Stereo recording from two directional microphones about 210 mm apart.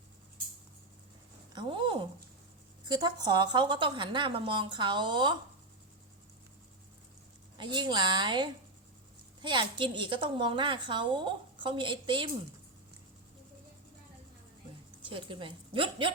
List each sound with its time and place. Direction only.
1.5 s a woman's voice: 25° right (ahead or behind)
7.6 s a woman's voice: 20° right (ahead or behind)
15.0 s a woman's voice: 25° right (ahead or behind)